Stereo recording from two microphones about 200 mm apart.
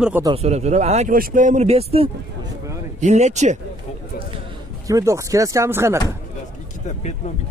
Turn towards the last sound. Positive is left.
turn(degrees=-15)  # may be behind; listen again after turning